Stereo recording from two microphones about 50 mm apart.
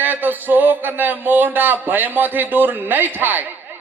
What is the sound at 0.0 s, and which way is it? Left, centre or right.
A man's voice, right.